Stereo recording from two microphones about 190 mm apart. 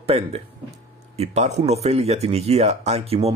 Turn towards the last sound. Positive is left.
turn(degrees=-35)  # may be behind; listen again after turning